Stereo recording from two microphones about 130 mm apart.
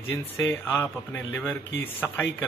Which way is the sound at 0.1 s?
15° left (ahead or behind).